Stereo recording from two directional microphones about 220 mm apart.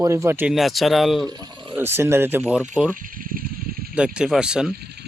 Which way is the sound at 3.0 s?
40° right (ahead or behind).